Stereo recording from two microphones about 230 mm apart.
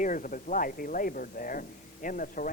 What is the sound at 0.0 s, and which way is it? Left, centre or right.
Speech, left.